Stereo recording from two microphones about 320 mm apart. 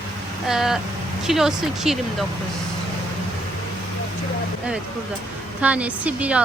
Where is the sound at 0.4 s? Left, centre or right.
Centre.